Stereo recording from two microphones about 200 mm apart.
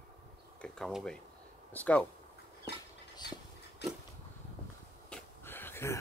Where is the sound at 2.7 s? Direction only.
55° left (ahead or behind).